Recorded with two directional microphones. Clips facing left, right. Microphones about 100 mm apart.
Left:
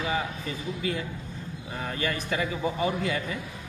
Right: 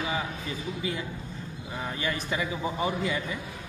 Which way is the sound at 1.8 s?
20° right (ahead or behind).